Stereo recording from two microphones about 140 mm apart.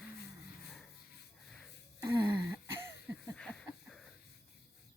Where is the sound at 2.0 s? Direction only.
30° right (ahead or behind).